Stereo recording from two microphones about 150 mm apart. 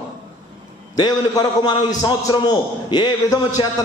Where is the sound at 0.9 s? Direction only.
25° left (ahead or behind).